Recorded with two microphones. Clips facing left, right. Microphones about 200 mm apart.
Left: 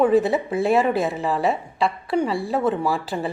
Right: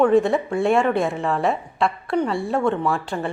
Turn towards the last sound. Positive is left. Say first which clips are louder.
# even
turn(degrees=5)  # may be behind; listen again after turning